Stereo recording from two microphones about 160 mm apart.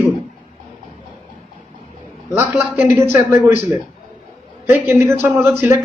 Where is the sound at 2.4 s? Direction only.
15° right (ahead or behind).